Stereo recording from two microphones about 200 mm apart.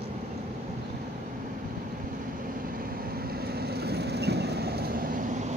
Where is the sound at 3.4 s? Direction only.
50° right (ahead or behind).